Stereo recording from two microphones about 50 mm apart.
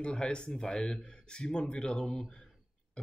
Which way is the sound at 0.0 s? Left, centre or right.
Centre.